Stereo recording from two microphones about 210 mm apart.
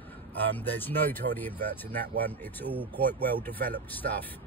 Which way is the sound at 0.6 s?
10° left (ahead or behind).